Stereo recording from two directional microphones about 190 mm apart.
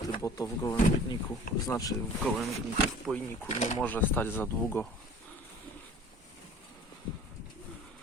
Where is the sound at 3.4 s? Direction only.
35° left (ahead or behind).